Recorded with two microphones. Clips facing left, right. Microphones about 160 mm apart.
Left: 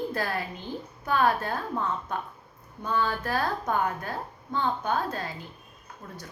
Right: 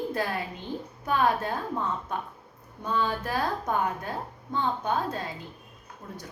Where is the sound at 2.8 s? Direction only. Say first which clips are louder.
Even; 15° right (ahead or behind).